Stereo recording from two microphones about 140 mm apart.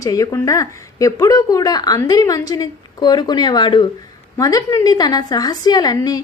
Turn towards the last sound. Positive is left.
turn(degrees=30)  # may be behind; listen again after turning